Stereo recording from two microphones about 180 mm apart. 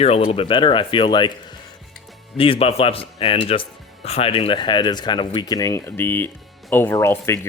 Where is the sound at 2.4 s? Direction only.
30° left (ahead or behind).